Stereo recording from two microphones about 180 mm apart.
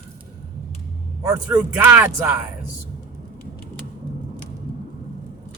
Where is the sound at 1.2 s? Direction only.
15° right (ahead or behind).